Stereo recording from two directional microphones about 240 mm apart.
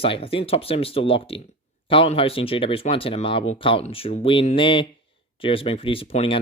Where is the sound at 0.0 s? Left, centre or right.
Left.